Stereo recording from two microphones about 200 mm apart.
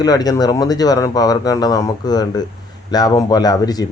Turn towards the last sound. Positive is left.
turn(degrees=20)  # may be behind; listen again after turning